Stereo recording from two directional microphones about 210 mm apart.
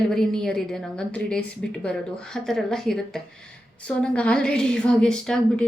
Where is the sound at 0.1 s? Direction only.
Centre (ahead or behind).